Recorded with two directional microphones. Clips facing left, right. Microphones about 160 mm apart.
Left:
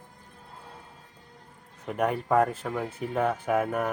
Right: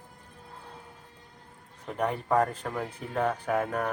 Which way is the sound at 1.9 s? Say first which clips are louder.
Left 2 dB; 10° left (ahead or behind).